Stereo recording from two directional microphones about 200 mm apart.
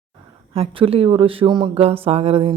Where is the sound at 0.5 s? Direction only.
30° right (ahead or behind).